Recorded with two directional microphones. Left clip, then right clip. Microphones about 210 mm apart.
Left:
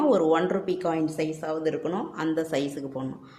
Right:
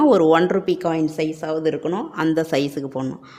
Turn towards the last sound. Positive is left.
turn(degrees=-35)  # may be behind; listen again after turning